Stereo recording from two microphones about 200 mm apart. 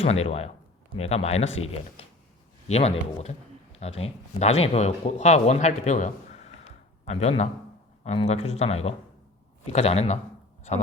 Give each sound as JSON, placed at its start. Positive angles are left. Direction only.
{"t": 0.0, "sound": "speech", "side_deg": 30}
{"t": 2.6, "sound": "speech", "side_deg": 30}